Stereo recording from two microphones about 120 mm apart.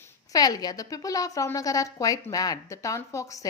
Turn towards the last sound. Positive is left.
turn(degrees=25)  # may be behind; listen again after turning